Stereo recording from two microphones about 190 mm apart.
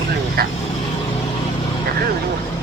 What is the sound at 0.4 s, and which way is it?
Speech, 55° right (ahead or behind).